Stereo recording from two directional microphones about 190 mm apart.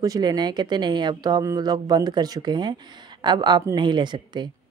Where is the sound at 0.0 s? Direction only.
20° right (ahead or behind).